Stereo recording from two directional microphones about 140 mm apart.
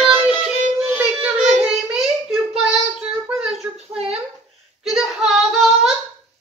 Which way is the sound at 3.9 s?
45° right (ahead or behind).